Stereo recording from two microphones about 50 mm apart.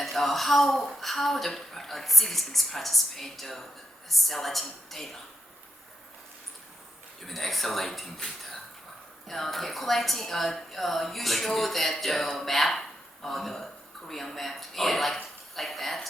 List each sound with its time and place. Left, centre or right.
0.0 s a woman's voice: centre
7.2 s a woman's voice: centre